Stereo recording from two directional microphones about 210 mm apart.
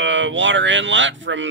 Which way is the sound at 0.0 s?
60° right (ahead or behind).